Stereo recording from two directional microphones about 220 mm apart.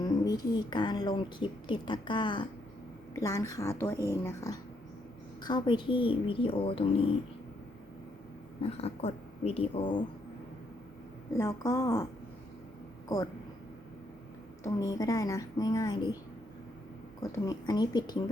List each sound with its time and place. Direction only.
0.0 s a woman's voice: 20° left (ahead or behind)
8.6 s speech: 25° left (ahead or behind)
11.3 s a woman's voice: 15° left (ahead or behind)
14.6 s a woman's voice: 15° left (ahead or behind)
17.3 s speech: 15° left (ahead or behind)